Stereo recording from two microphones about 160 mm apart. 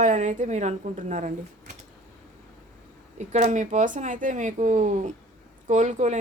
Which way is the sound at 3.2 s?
50° right (ahead or behind).